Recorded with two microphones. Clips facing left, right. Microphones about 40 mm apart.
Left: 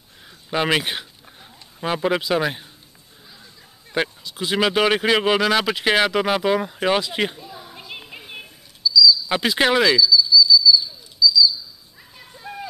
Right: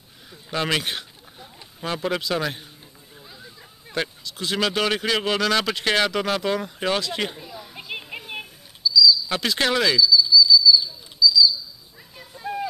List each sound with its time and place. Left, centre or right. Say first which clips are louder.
0.5 s speech: left 4 dB; centre
3.9 s speech: left 4 dB; centre
7.9 s music: right 4 dB; centre
8.3 s bird: right 3 dB; centre
9.3 s speech: left 4 dB; centre
10.1 s bird flight: left 1 dB; centre
12.2 s a sound: right 5 dB; centre